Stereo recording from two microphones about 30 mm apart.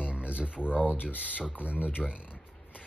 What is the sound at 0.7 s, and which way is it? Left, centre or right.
Speech, left.